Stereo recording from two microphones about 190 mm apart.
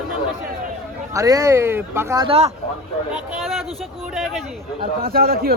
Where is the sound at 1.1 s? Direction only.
20° right (ahead or behind).